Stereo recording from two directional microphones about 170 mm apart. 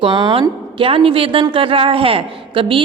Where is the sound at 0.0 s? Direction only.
30° right (ahead or behind).